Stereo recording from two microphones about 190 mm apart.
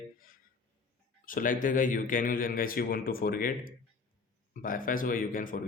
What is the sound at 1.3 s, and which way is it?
A man's voice, 45° left (ahead or behind).